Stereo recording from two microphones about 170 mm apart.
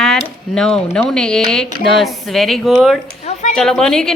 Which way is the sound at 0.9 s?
5° left (ahead or behind).